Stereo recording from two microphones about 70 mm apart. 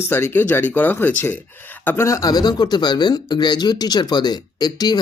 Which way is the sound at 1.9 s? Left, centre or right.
Left.